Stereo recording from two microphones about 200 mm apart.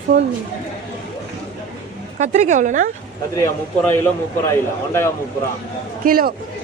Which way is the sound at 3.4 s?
10° left (ahead or behind).